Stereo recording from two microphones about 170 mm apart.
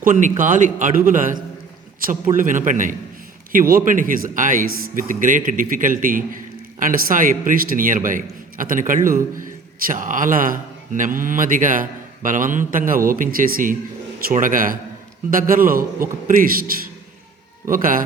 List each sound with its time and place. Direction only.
0.0 s a man's voice: 50° right (ahead or behind)
17.7 s a man's voice: 55° right (ahead or behind)